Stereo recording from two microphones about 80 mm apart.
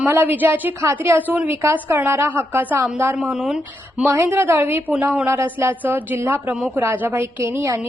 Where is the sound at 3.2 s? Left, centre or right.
Centre.